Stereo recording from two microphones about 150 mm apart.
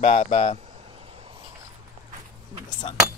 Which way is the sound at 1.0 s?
40° right (ahead or behind).